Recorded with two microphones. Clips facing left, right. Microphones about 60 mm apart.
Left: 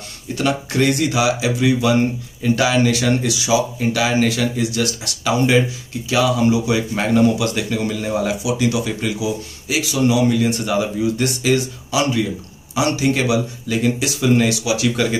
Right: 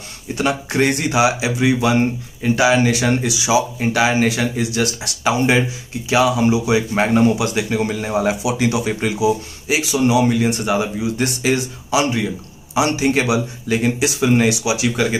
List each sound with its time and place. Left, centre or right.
0.4 s speech: right